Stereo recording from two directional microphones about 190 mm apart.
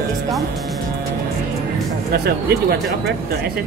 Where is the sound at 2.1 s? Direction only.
55° right (ahead or behind).